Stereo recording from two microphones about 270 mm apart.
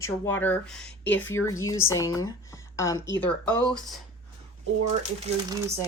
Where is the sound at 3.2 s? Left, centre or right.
Centre.